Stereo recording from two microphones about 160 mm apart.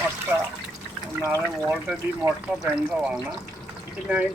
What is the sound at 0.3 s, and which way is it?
Water, 15° right (ahead or behind).